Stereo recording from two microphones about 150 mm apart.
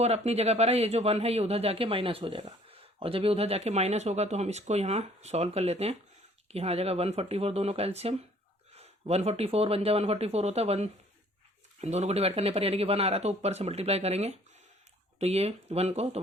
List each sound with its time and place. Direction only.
0.0 s speech: 45° right (ahead or behind)